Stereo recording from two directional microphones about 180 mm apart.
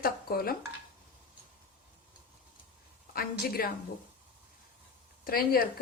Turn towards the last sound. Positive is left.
turn(degrees=55)  # may be behind; listen again after turning